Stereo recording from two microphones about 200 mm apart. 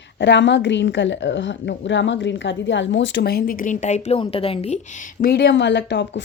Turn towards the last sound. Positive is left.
turn(degrees=60)  # may be behind; listen again after turning